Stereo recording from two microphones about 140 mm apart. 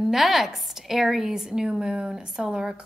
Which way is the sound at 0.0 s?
Centre (ahead or behind).